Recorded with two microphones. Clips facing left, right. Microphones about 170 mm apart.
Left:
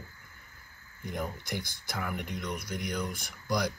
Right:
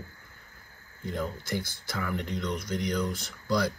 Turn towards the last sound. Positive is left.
turn(degrees=15)  # may be behind; listen again after turning